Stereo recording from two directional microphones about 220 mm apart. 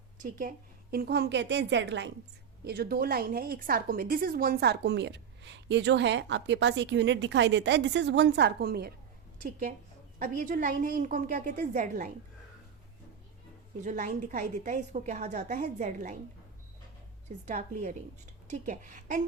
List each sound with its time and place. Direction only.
0.2 s a woman's voice: 40° right (ahead or behind)
13.8 s a woman's voice: 35° right (ahead or behind)
17.2 s a woman's voice: 30° right (ahead or behind)